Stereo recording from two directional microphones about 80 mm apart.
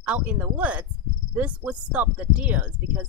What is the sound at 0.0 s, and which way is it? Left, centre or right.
Speech, centre.